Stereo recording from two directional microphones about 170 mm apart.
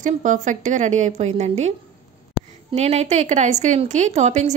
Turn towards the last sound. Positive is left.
turn(degrees=-45)  # may be behind; listen again after turning